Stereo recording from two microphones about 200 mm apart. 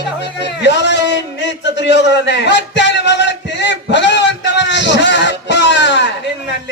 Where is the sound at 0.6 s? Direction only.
60° left (ahead or behind).